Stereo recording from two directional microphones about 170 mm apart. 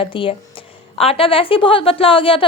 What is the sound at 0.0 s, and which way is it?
A woman's voice, 30° left (ahead or behind).